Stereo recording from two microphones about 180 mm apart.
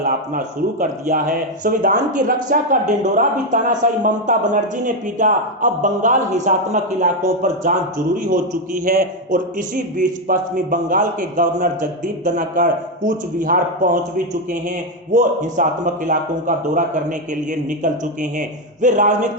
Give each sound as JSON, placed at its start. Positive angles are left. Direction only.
{"t": 0.0, "sound": "speech", "side_deg": -50}
{"t": 15.1, "sound": "speech", "side_deg": -45}